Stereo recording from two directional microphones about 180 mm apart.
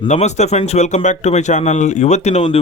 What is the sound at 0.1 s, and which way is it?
Speech, 40° left (ahead or behind).